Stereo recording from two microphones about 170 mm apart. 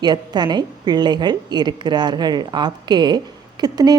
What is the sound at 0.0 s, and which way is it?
A woman's voice, 25° right (ahead or behind).